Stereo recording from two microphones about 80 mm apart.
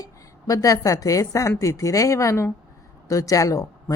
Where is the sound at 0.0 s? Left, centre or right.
Left.